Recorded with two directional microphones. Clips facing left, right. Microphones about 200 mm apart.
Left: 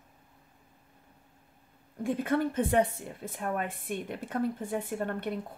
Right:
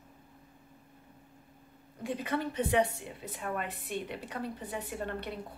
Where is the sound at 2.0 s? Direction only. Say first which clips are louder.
Left 5 dB; 50° left (ahead or behind).